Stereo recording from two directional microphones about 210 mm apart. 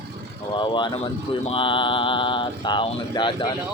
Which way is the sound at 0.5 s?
20° left (ahead or behind).